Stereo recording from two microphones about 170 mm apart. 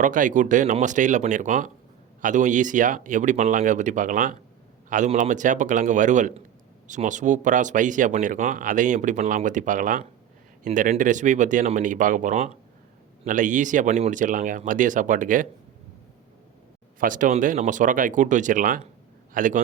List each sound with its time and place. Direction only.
0.0 s speech: 50° right (ahead or behind)
17.0 s a man's voice: 50° right (ahead or behind)